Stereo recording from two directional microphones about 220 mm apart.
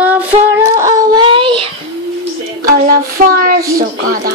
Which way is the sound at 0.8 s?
15° right (ahead or behind).